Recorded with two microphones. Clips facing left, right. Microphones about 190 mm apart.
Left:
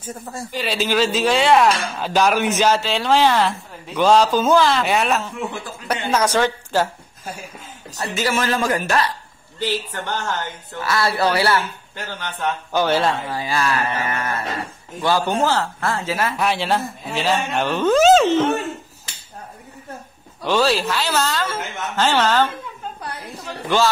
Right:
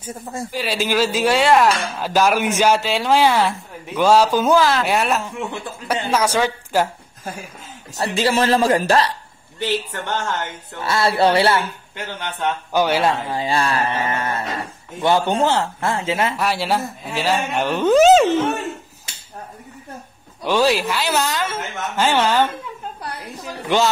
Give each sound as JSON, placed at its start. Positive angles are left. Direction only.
{"t": 0.0, "sound": "speech", "side_deg": -10}
{"t": 8.0, "sound": "a man's voice", "side_deg": -35}
{"t": 13.4, "sound": "a woman's voice", "side_deg": -30}
{"t": 16.3, "sound": "speech", "side_deg": -5}
{"t": 20.4, "sound": "speech", "side_deg": -15}